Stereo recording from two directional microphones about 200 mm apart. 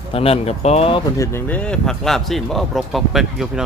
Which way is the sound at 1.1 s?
15° left (ahead or behind).